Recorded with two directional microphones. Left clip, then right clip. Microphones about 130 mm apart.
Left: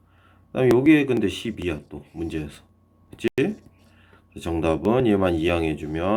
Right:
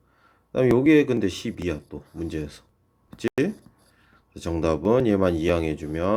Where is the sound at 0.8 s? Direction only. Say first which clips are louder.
Even; 35° right (ahead or behind).